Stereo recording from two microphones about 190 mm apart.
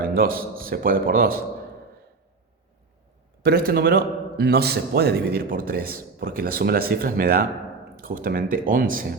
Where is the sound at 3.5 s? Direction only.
55° right (ahead or behind).